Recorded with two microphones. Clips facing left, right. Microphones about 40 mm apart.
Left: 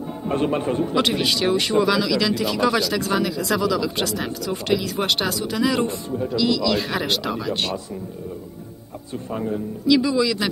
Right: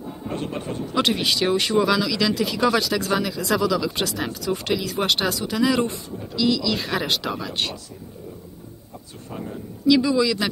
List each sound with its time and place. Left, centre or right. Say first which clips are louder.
0.3 s a man's voice: left 8 dB; left
0.9 s speech: right 3 dB; centre
9.8 s speech: even; centre